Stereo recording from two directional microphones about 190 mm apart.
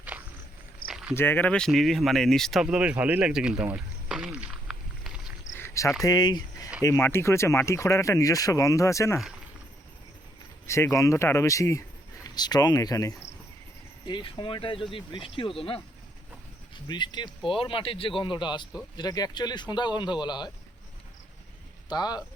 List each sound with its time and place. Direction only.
0.1 s walk: 10° right (ahead or behind)
0.9 s a sound: 5° right (ahead or behind)
1.1 s speech: 10° left (ahead or behind)
5.5 s cricket: 15° left (ahead or behind)
6.0 s speech: 20° left (ahead or behind)
10.7 s speech: 15° left (ahead or behind)
21.8 s speech: 20° left (ahead or behind)